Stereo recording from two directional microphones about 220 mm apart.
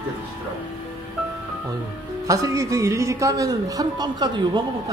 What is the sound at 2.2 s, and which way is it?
A man's voice, 15° right (ahead or behind).